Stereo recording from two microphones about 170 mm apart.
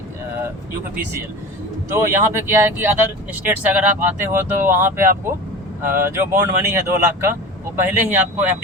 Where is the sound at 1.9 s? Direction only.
15° right (ahead or behind).